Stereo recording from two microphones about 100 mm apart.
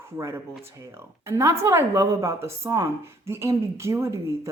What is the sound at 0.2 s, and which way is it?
A woman's voice, 25° right (ahead or behind).